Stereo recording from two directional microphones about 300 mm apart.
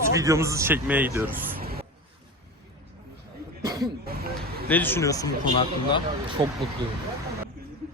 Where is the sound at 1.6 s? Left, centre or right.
Right.